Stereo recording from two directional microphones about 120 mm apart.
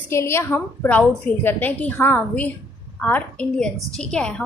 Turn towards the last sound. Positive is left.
turn(degrees=10)  # may be behind; listen again after turning